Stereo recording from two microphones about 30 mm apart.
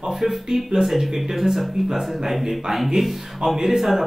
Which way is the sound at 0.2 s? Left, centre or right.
Centre.